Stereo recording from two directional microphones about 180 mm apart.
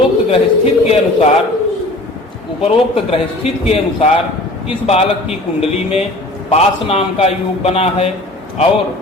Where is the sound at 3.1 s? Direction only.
35° left (ahead or behind).